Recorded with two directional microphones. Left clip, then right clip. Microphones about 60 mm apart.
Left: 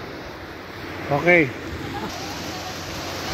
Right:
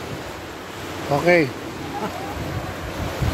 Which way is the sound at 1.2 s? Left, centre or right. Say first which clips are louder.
Left 1 dB; centre.